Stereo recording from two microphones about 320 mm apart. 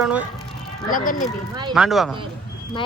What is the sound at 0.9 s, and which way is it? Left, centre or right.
Speech, left.